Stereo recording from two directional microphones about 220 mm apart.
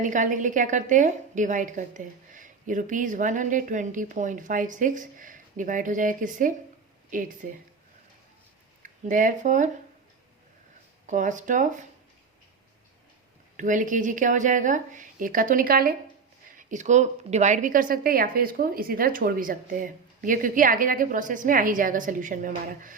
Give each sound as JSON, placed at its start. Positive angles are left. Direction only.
{"t": 0.0, "sound": "a woman's voice", "side_deg": -35}
{"t": 8.8, "sound": "speech", "side_deg": -35}
{"t": 11.0, "sound": "a woman's voice", "side_deg": -35}
{"t": 13.6, "sound": "a woman's voice", "side_deg": -35}